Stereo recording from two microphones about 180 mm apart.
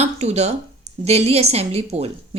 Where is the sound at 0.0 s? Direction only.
35° right (ahead or behind).